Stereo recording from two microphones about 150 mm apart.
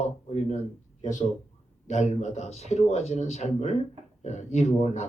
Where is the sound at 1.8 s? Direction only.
50° left (ahead or behind).